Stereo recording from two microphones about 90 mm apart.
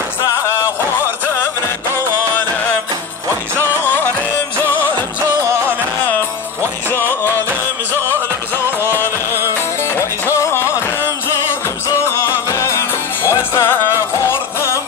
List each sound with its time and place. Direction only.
3.5 s music: 20° left (ahead or behind)
5.4 s music: 30° right (ahead or behind)
6.9 s music: 25° left (ahead or behind)
8.9 s music: 25° left (ahead or behind)
12.4 s music: 35° left (ahead or behind)